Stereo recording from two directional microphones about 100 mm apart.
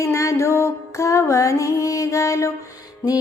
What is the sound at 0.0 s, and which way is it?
Music, 30° left (ahead or behind).